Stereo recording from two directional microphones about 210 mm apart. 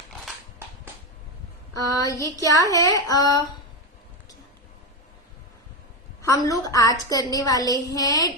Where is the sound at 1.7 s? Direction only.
15° left (ahead or behind).